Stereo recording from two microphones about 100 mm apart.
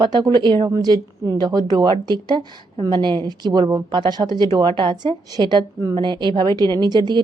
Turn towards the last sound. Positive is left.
turn(degrees=-45)  # may be behind; listen again after turning